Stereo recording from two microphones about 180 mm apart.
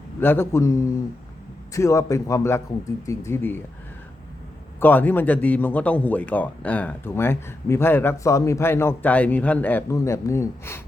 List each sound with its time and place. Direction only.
0.2 s a man's voice: 10° left (ahead or behind)
4.8 s a man's voice: 10° left (ahead or behind)